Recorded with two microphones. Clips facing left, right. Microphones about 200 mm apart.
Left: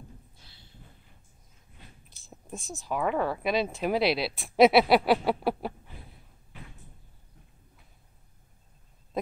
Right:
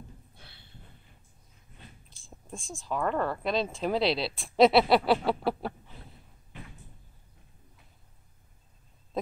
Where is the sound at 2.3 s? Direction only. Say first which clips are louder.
Left 2 dB; 5° left (ahead or behind).